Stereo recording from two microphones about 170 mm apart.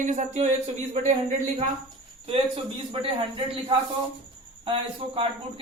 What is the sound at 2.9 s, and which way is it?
A man's voice, 30° right (ahead or behind).